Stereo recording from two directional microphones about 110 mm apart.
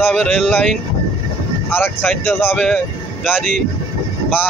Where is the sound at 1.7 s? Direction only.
20° left (ahead or behind).